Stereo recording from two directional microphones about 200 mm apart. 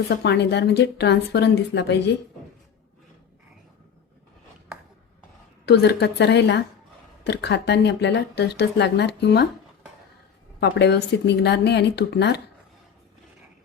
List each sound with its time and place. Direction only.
0.1 s speech: 55° left (ahead or behind)
5.6 s speech: 55° left (ahead or behind)
10.6 s speech: 60° left (ahead or behind)